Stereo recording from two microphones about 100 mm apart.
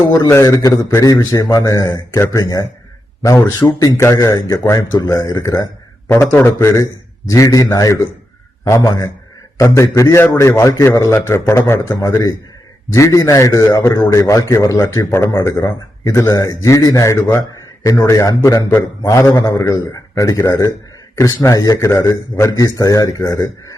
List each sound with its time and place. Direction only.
0.0 s speech: 35° left (ahead or behind)
3.9 s a man's voice: 30° left (ahead or behind)
4.9 s speech: 35° left (ahead or behind)
6.1 s a man's voice: 25° left (ahead or behind)
12.9 s speech: 30° left (ahead or behind)